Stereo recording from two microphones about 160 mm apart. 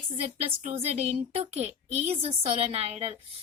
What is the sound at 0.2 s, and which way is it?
A woman's voice, 45° right (ahead or behind).